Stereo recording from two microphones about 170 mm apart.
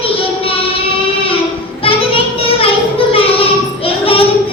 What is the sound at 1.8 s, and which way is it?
Child singing, 30° left (ahead or behind).